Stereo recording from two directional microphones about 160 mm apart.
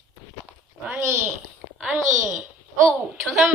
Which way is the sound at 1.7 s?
5° right (ahead or behind).